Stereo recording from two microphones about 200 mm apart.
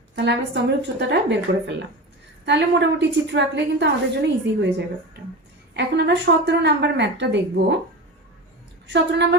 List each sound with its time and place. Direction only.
0.2 s a woman's voice: 60° right (ahead or behind)
5.7 s a woman's voice: 60° right (ahead or behind)
8.9 s a woman's voice: 60° right (ahead or behind)